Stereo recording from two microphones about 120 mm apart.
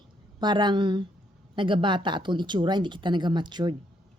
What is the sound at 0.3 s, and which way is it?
Speech, 40° right (ahead or behind).